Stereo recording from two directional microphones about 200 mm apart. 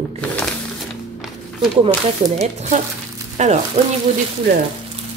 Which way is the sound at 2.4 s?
35° right (ahead or behind).